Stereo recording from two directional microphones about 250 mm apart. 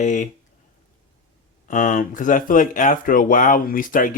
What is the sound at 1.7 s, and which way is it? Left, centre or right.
Speech, left.